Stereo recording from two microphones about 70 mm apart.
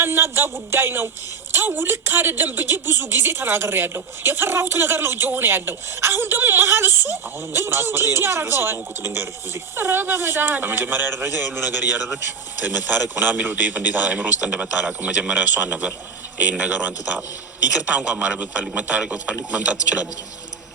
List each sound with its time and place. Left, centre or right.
0.0 s a man's voice: right
12.6 s a man's voice: right